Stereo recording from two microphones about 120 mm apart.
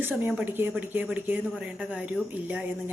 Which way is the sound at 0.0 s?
15° right (ahead or behind).